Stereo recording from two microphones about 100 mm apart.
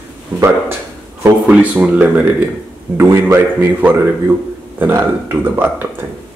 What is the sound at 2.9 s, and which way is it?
A man's voice, 25° right (ahead or behind).